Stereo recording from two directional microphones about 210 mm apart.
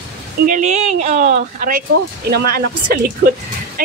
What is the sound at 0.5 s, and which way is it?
A woman's voice, 35° right (ahead or behind).